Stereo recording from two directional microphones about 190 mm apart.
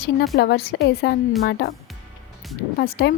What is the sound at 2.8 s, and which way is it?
Speech, 55° left (ahead or behind).